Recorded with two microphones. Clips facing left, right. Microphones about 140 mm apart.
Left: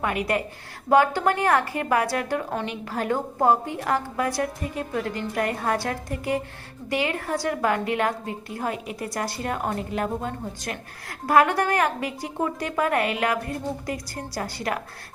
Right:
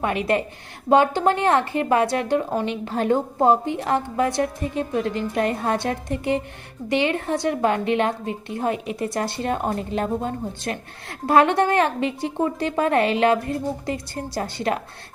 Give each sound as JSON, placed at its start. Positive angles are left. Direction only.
{"t": 0.0, "sound": "a woman's voice", "side_deg": -25}